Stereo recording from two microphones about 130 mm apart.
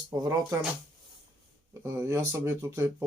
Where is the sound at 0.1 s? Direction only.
30° right (ahead or behind).